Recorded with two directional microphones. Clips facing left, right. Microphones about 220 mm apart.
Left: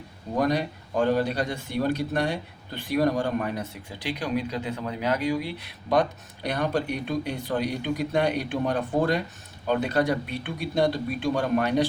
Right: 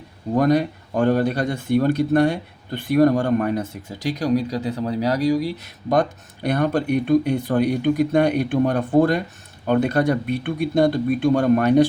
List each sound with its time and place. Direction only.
0.3 s speech: 50° right (ahead or behind)